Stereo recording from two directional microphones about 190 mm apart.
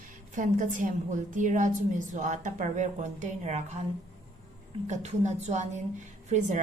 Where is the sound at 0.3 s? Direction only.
45° right (ahead or behind).